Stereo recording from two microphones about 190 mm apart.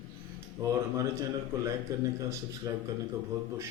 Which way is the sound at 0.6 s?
15° right (ahead or behind).